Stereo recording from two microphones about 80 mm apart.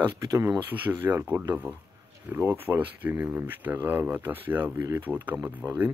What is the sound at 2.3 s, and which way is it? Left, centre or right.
Speech, right.